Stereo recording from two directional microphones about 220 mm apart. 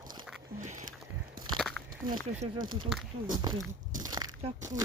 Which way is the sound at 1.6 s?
Centre (ahead or behind).